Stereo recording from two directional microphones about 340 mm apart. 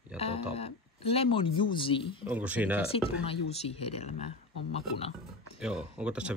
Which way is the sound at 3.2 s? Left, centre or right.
Centre.